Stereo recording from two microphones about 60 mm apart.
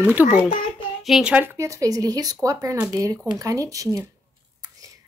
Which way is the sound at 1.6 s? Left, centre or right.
Right.